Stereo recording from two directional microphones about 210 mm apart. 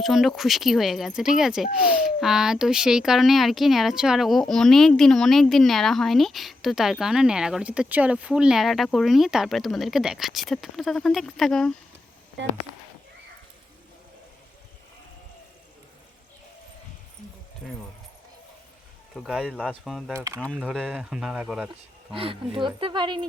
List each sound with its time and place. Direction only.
0.0 s speech: centre (ahead or behind)
12.4 s speech: 60° right (ahead or behind)
17.6 s speech: centre (ahead or behind)
19.1 s speech: centre (ahead or behind)
20.1 s speech: 15° right (ahead or behind)
22.1 s speech: 25° right (ahead or behind)